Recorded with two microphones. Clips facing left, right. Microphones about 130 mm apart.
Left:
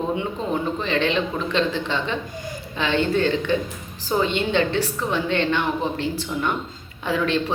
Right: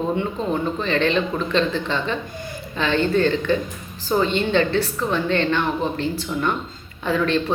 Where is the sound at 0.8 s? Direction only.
15° left (ahead or behind).